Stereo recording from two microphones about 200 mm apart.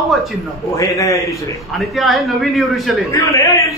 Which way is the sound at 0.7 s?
15° left (ahead or behind).